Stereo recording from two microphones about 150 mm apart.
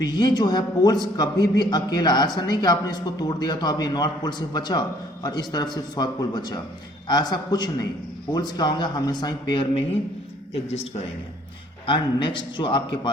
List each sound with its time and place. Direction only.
0.0 s a man's voice: 30° left (ahead or behind)
10.5 s speech: 45° left (ahead or behind)
11.9 s a man's voice: 35° left (ahead or behind)